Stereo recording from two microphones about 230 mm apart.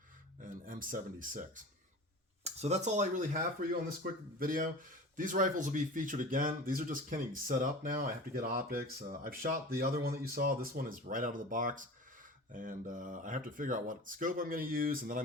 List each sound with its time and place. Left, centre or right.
0.4 s speech: right